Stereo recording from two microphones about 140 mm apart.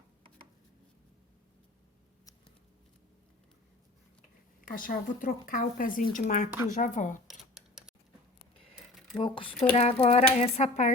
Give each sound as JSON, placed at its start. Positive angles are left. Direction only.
{"t": 4.7, "sound": "speech", "side_deg": 75}
{"t": 6.1, "sound": "speech", "side_deg": 65}
{"t": 7.3, "sound": "a sound", "side_deg": -5}
{"t": 9.1, "sound": "speech", "side_deg": 40}
{"t": 9.7, "sound": "speech", "side_deg": 50}